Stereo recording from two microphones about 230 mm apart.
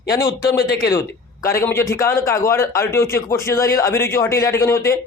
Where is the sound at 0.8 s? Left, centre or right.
Centre.